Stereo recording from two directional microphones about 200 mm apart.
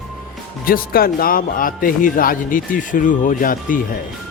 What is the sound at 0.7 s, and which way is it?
Speech, 50° left (ahead or behind).